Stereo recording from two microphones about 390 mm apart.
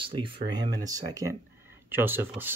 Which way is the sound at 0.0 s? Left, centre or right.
Centre.